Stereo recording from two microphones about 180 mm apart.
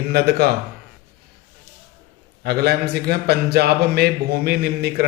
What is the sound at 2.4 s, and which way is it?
A man's voice, 60° right (ahead or behind).